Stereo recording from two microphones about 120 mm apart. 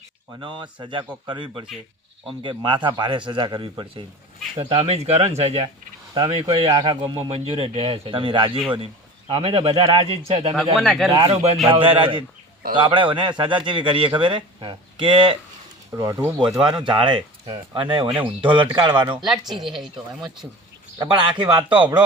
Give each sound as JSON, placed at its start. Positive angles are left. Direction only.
{"t": 0.3, "sound": "a man's voice", "side_deg": -40}
{"t": 4.7, "sound": "speech", "side_deg": -60}
{"t": 6.1, "sound": "a man's voice", "side_deg": -40}
{"t": 7.2, "sound": "speech", "side_deg": -55}
{"t": 10.5, "sound": "speech", "side_deg": 0}
{"t": 11.2, "sound": "speech", "side_deg": -55}
{"t": 15.9, "sound": "speech", "side_deg": -25}
{"t": 16.5, "sound": "speech", "side_deg": -5}
{"t": 16.8, "sound": "speech", "side_deg": -45}
{"t": 19.2, "sound": "speech", "side_deg": 0}
{"t": 21.1, "sound": "speech", "side_deg": -45}
{"t": 21.4, "sound": "speech", "side_deg": -10}